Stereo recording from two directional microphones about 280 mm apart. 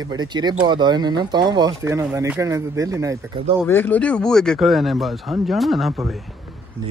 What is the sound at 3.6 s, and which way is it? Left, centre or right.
Speech, centre.